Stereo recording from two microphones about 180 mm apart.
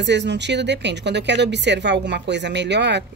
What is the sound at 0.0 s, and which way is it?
A woman's voice, 75° right (ahead or behind).